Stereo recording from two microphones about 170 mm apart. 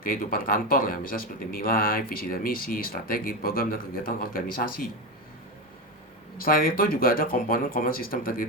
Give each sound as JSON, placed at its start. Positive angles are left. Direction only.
{"t": 0.0, "sound": "speech", "side_deg": 55}
{"t": 6.3, "sound": "speech", "side_deg": 55}